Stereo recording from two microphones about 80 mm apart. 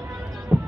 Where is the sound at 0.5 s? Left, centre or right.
Right.